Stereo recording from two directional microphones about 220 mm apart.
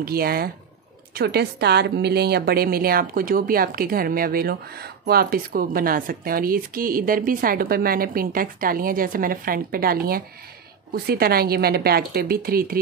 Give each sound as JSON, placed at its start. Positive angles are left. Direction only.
{"t": 0.0, "sound": "a woman's voice", "side_deg": -45}